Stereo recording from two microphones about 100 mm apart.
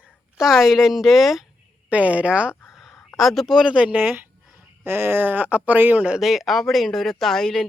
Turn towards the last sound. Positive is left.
turn(degrees=0)  # may be behind; listen again after turning